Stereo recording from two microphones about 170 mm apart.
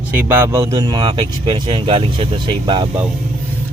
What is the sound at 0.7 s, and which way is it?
Speech, 25° right (ahead or behind).